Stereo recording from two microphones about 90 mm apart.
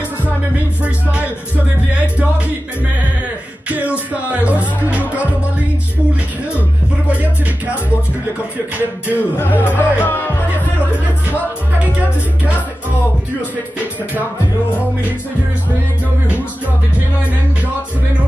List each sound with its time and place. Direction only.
2.1 s music: 15° right (ahead or behind)
4.3 s music: 15° right (ahead or behind)
7.1 s music: 15° right (ahead or behind)
9.4 s speech: 25° left (ahead or behind)